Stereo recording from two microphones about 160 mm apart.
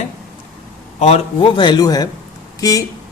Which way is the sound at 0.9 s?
40° left (ahead or behind).